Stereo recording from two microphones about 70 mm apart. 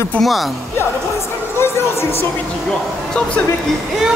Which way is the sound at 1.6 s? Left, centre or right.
Left.